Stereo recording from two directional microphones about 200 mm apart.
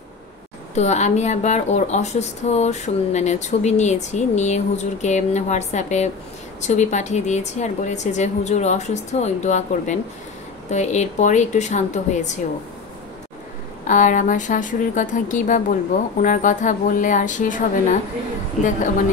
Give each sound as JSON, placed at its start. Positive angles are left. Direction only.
{"t": 0.7, "sound": "speech", "side_deg": 35}
{"t": 13.8, "sound": "speech", "side_deg": 40}